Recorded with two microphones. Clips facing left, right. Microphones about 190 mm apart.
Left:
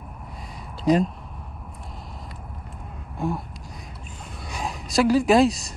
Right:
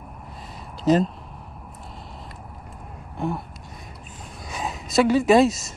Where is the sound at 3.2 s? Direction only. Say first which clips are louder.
Even; centre (ahead or behind).